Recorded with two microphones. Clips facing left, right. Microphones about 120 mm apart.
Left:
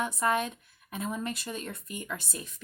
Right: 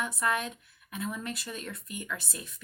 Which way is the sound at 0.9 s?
35° left (ahead or behind).